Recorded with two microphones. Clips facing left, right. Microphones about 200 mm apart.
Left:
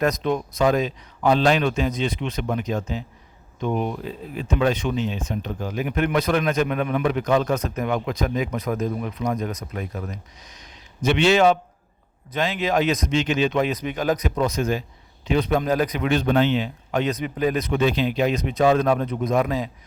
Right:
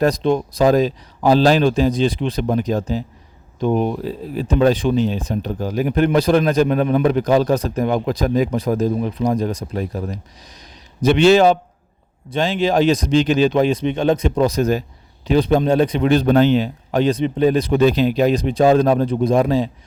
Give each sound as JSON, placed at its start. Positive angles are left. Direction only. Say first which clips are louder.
{"t": 0.0, "sound": "speech", "louder": "right 5 dB", "side_deg": -30}